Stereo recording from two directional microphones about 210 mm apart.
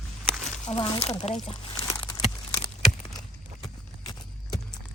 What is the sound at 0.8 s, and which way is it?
Speech, 30° left (ahead or behind).